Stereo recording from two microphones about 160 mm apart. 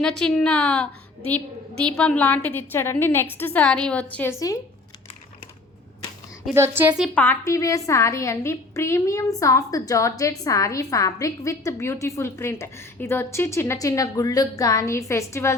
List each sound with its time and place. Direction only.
0.0 s a woman's voice: 5° left (ahead or behind); by 4.6 s 20° left (ahead or behind)
6.5 s a woman's voice: 15° right (ahead or behind)
7.1 s a woman's voice: 10° left (ahead or behind)